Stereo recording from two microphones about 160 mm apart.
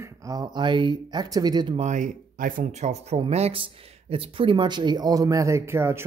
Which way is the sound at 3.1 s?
40° right (ahead or behind).